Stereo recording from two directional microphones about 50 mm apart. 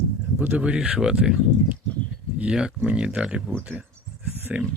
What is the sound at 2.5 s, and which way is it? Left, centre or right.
Speech, centre.